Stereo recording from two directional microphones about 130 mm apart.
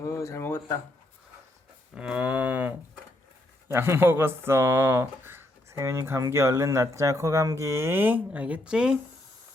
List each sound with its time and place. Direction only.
0.0 s a sound: 20° left (ahead or behind)
2.0 s cattle: 10° right (ahead or behind)
3.7 s speech: 20° right (ahead or behind)